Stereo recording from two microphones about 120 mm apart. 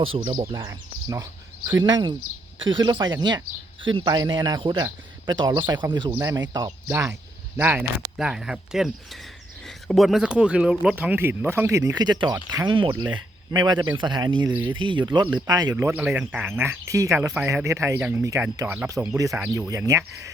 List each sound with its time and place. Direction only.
0.0 s speech: 45° right (ahead or behind)
7.5 s speech: 15° right (ahead or behind)
8.2 s speech: 5° right (ahead or behind); by 15.7 s 35° right (ahead or behind)
15.7 s speech: 20° right (ahead or behind)